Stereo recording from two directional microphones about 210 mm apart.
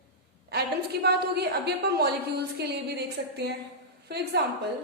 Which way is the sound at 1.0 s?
50° right (ahead or behind).